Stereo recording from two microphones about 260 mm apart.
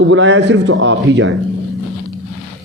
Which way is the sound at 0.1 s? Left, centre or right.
Right.